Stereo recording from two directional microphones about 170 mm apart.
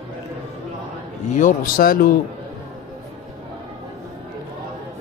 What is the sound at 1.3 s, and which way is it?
Mantra, 50° left (ahead or behind).